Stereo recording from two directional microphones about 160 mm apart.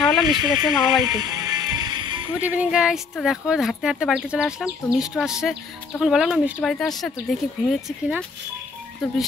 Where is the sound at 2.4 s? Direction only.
10° right (ahead or behind).